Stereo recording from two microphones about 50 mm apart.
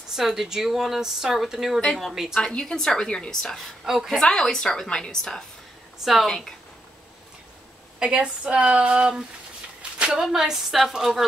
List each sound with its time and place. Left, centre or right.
0.1 s a woman's voice: centre
2.4 s a woman's voice: centre
3.8 s speech: centre
4.1 s a woman's voice: centre
8.0 s speech: centre
9.8 s a sound: right
10.1 s speech: centre